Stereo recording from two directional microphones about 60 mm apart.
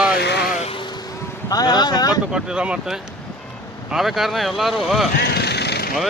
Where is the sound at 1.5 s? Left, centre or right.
Left.